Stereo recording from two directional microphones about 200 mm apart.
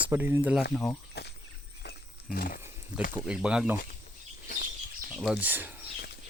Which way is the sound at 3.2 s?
5° right (ahead or behind).